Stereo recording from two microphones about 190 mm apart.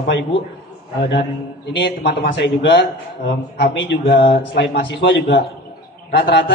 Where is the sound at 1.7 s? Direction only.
55° left (ahead or behind).